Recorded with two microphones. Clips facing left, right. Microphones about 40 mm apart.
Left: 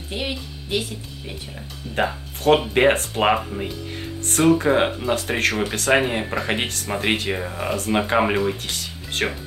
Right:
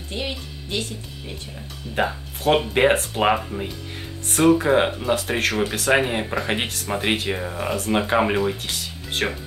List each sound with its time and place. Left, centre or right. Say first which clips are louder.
0.1 s speech: left 1 dB; centre
2.0 s speech: even; centre